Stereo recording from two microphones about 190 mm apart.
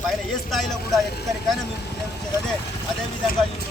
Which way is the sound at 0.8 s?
55° left (ahead or behind).